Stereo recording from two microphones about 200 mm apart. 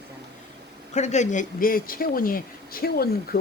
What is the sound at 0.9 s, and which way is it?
Speech, 35° left (ahead or behind).